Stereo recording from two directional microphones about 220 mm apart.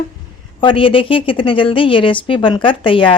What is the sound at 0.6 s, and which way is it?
A woman's voice, 25° left (ahead or behind).